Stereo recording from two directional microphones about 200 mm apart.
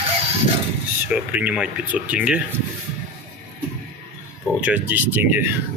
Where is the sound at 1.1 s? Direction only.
5° right (ahead or behind).